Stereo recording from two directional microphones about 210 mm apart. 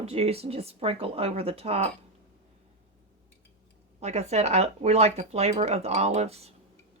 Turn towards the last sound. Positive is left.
turn(degrees=-30)  # may be behind; listen again after turning